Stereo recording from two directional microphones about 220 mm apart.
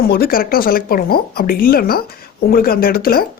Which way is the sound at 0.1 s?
40° left (ahead or behind).